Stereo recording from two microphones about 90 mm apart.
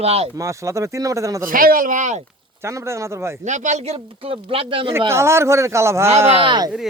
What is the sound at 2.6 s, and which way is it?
Speech, 30° right (ahead or behind).